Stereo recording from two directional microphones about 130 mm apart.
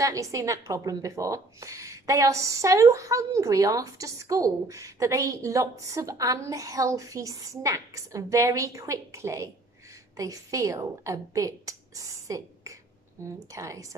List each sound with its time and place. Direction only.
0.0 s a woman's voice: 25° right (ahead or behind)